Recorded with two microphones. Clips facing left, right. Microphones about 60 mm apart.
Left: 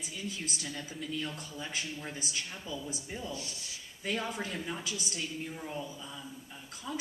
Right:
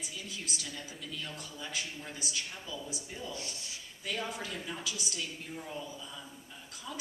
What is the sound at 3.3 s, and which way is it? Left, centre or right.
Speech, right.